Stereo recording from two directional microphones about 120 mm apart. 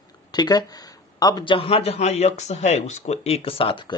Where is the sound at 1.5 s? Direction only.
50° left (ahead or behind).